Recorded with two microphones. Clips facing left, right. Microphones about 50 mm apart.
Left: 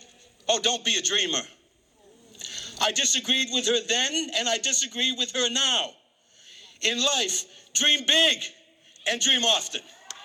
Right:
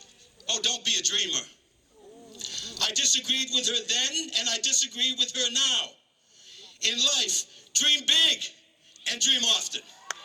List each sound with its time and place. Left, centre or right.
0.0 s a man's voice: left